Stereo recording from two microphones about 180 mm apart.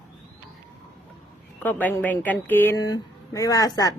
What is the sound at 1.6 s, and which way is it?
Speech, 10° left (ahead or behind).